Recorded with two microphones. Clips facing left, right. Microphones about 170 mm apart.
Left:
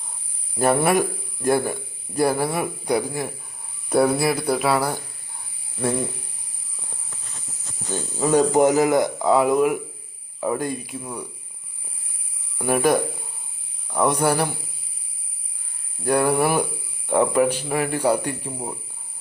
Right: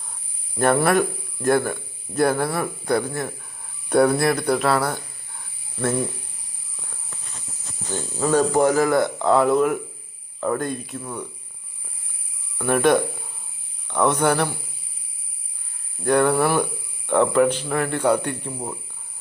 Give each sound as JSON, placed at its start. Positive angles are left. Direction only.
{"t": 0.9, "sound": "speech", "side_deg": 10}
{"t": 7.9, "sound": "speech", "side_deg": 15}
{"t": 12.5, "sound": "speech", "side_deg": 10}
{"t": 16.0, "sound": "speech", "side_deg": 10}